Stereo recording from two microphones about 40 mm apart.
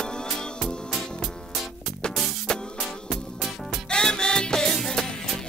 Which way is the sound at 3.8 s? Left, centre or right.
Centre.